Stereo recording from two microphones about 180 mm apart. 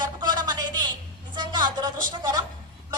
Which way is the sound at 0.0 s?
25° right (ahead or behind).